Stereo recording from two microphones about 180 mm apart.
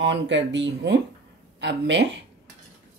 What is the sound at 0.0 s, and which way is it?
Speech, 80° right.